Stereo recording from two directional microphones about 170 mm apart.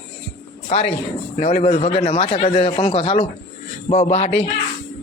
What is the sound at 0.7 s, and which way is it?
A man's voice, 40° left (ahead or behind).